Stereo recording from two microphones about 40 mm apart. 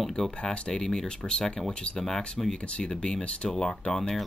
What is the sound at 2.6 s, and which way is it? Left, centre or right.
Speech, left.